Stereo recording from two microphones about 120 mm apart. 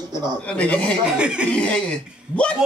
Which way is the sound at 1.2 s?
10° right (ahead or behind).